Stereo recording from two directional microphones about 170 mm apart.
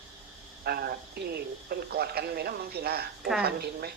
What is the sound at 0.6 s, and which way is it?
Speech, 65° right (ahead or behind).